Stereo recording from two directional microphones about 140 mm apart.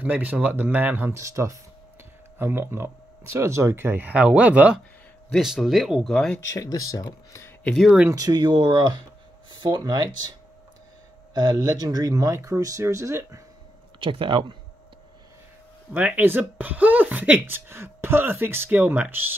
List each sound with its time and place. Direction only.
0.0 s speech: 10° right (ahead or behind); by 6.4 s 5° left (ahead or behind)
6.5 s speech: 25° left (ahead or behind)
7.7 s speech: 5° right (ahead or behind)
8.1 s speech: 25° right (ahead or behind)
11.3 s speech: 30° right (ahead or behind)
13.9 s speech: 40° right (ahead or behind)
15.9 s speech: 10° right (ahead or behind)